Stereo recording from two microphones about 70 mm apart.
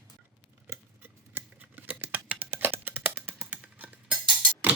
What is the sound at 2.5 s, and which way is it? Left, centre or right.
Computer keyboard, right.